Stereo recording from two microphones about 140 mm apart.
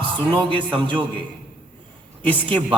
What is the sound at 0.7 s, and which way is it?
Speech, 35° right (ahead or behind).